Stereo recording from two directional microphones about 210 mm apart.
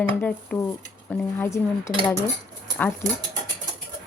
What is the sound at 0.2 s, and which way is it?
Speech, 10° left (ahead or behind).